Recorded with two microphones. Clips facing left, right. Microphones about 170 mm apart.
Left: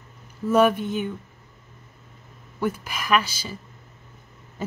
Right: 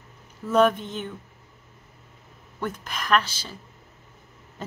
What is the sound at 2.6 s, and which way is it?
Speech, 10° left (ahead or behind).